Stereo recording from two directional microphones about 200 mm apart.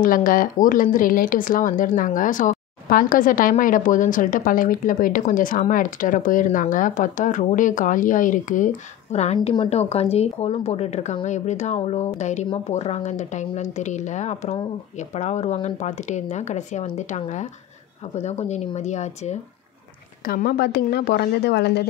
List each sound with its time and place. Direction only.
0.0 s speech: 45° left (ahead or behind)
20.2 s a woman's voice: 50° left (ahead or behind)